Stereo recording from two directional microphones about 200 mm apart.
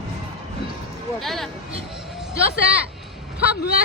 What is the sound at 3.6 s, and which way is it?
Speech, 50° left (ahead or behind).